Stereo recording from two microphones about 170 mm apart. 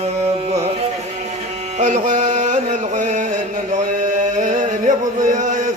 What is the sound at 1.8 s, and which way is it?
Music, 45° right (ahead or behind).